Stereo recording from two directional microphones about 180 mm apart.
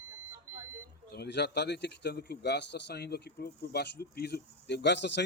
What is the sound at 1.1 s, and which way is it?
A man's voice, 70° left (ahead or behind).